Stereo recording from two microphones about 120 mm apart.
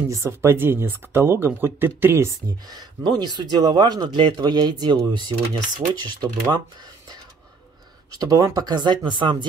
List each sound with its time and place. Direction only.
0.1 s speech: 25° right (ahead or behind)
2.7 s speech: 35° right (ahead or behind)
8.2 s speech: 30° right (ahead or behind)